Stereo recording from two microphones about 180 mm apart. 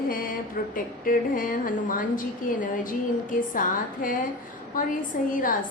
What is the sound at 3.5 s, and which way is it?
A woman's voice, 50° left (ahead or behind).